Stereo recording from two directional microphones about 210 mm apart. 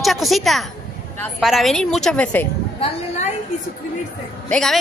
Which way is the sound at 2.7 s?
25° left (ahead or behind).